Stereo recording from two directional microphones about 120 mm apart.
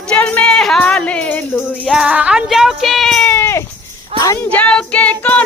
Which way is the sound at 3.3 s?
20° left (ahead or behind).